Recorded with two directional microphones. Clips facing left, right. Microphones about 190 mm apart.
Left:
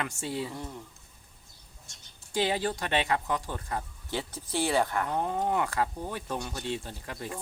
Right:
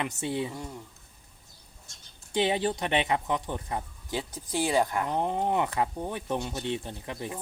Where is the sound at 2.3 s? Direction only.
20° right (ahead or behind).